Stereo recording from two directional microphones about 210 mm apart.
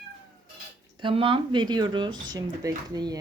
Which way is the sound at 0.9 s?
25° right (ahead or behind).